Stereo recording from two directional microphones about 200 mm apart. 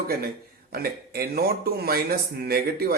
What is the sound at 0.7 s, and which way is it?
Speech, 50° right (ahead or behind).